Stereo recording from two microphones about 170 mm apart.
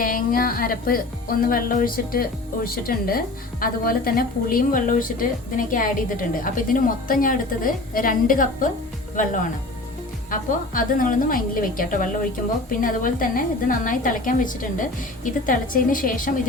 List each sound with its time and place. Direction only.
0.0 s a woman's voice: 55° left (ahead or behind)